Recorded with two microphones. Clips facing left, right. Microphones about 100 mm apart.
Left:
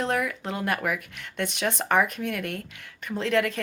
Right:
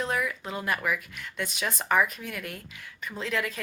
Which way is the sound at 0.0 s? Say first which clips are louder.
Left 3 dB; 55° left (ahead or behind).